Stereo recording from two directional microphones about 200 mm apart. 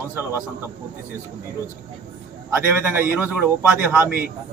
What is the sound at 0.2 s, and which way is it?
Speech, 10° right (ahead or behind).